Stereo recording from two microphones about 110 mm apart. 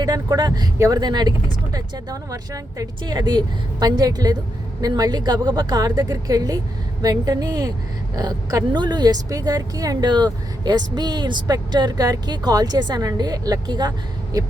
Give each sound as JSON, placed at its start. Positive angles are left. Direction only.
{"t": 0.0, "sound": "speech", "side_deg": -35}